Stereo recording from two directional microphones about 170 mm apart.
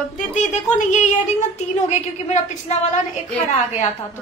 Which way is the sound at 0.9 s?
45° left (ahead or behind).